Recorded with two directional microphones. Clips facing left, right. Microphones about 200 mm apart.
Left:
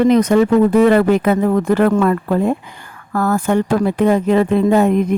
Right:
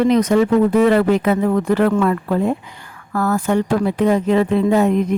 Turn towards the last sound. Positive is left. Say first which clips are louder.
# left 2 dB
turn(degrees=55)  # may be behind; listen again after turning